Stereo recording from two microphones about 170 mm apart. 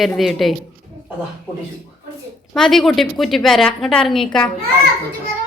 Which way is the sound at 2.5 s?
Centre (ahead or behind).